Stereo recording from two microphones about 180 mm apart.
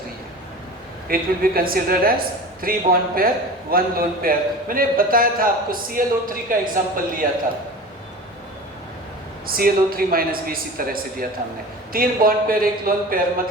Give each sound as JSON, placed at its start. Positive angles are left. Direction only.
{"t": 1.0, "sound": "a woman's voice", "side_deg": -55}
{"t": 9.5, "sound": "a woman's voice", "side_deg": -55}